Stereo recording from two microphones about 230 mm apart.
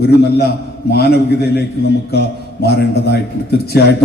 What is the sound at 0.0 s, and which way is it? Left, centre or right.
A man's voice, left.